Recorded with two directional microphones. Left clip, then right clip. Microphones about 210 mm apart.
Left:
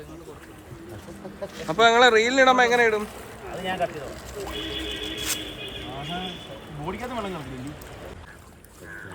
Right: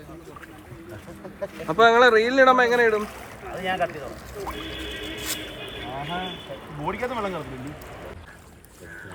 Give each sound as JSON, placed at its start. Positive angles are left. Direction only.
{"t": 1.4, "sound": "speech", "side_deg": 0}
{"t": 4.4, "sound": "music", "side_deg": 0}
{"t": 6.8, "sound": "speech", "side_deg": 0}